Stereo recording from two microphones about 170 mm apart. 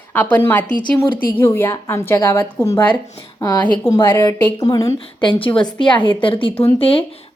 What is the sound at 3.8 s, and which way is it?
A woman's voice, 15° left (ahead or behind).